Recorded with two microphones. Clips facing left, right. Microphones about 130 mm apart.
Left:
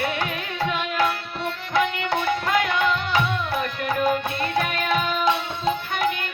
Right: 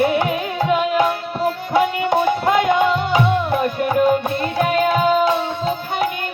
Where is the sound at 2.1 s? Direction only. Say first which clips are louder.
Right 6 dB; 20° right (ahead or behind).